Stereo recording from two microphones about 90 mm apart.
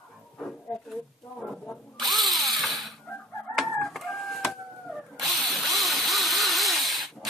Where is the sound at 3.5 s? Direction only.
Centre (ahead or behind).